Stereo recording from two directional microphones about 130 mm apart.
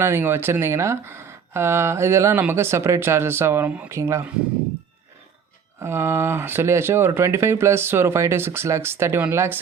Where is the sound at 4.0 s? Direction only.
25° right (ahead or behind).